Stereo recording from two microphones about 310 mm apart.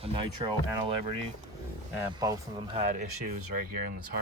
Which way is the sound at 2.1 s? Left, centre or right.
Centre.